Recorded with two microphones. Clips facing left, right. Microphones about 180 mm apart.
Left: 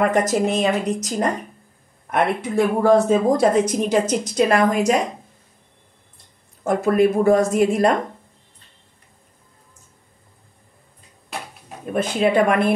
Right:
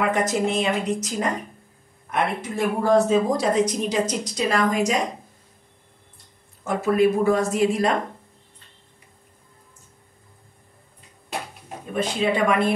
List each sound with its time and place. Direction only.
0.1 s speech: 40° left (ahead or behind)
2.0 s a woman's voice: 55° left (ahead or behind)
6.6 s speech: 50° left (ahead or behind)
11.9 s a woman's voice: 55° left (ahead or behind)